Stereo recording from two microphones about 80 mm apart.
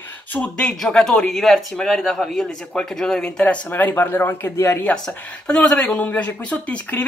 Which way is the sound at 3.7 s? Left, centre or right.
Left.